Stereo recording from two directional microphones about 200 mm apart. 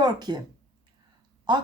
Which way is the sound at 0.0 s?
20° right (ahead or behind).